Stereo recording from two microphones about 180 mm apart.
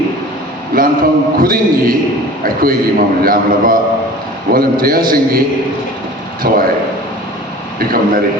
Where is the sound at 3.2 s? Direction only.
55° right (ahead or behind).